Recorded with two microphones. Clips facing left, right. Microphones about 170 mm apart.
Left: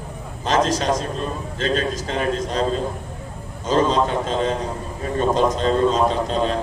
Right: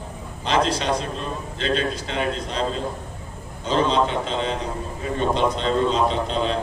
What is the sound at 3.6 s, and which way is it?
A man's voice, 45° left (ahead or behind).